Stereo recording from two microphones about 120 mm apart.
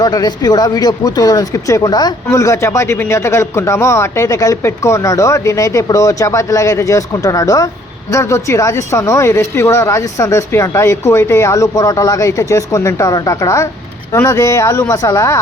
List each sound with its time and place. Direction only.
0.0 s speech: 35° left (ahead or behind)